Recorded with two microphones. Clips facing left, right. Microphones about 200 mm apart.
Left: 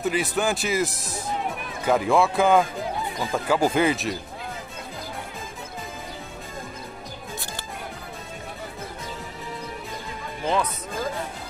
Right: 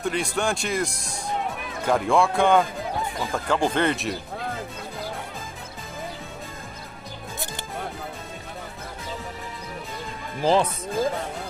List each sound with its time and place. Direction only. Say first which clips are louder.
0.0 s speech: left 1 dB; 5° left (ahead or behind)
10.4 s speech: right 4 dB; 30° right (ahead or behind)